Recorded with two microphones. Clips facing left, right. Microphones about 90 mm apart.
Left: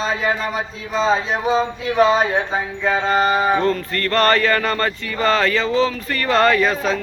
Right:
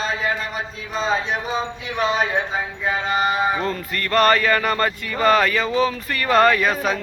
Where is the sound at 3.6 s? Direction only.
10° right (ahead or behind).